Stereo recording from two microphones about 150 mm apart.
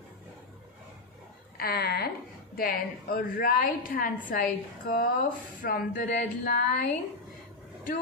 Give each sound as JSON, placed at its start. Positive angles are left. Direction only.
{"t": 1.6, "sound": "a woman's voice", "side_deg": 90}
{"t": 5.6, "sound": "a woman's voice", "side_deg": 70}